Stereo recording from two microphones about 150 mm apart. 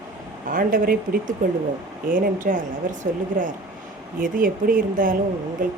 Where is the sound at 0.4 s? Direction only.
65° right (ahead or behind).